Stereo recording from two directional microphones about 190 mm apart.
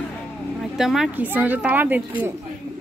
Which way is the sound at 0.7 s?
Centre (ahead or behind).